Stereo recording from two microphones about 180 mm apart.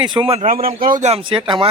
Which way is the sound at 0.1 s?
30° right (ahead or behind).